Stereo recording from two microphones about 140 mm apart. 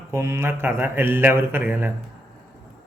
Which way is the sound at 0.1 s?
20° right (ahead or behind).